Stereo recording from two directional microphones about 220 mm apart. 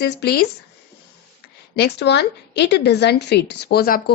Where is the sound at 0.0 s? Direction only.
45° left (ahead or behind).